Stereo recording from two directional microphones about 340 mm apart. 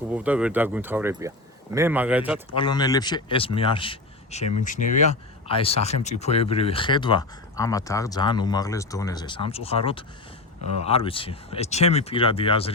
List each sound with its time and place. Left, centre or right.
0.1 s speech: centre
2.6 s speech: centre